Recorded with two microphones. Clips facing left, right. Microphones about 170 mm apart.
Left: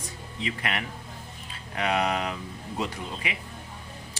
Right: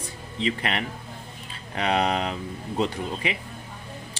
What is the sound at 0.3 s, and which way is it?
Speech, 30° right (ahead or behind).